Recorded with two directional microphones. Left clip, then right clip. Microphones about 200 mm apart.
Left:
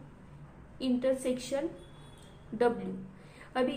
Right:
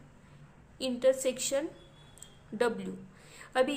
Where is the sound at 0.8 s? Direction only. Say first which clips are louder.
Right 3 dB; 25° right (ahead or behind).